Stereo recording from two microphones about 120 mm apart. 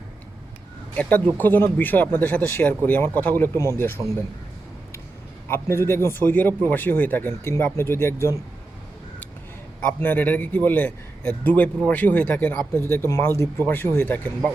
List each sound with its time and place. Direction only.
1.4 s speech: 15° left (ahead or behind)
5.5 s a man's voice: 20° left (ahead or behind)
10.0 s a man's voice: 15° left (ahead or behind)